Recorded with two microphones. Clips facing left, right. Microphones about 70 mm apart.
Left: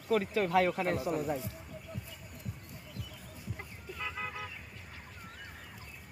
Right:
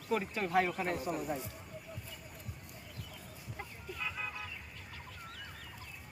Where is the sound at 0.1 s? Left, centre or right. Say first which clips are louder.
Left 4 dB; left.